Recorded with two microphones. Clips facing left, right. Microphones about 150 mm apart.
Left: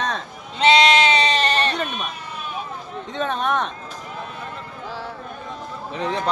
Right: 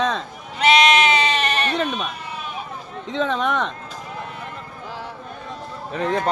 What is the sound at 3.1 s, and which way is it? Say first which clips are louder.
Speech: right 1 dB; 90° right.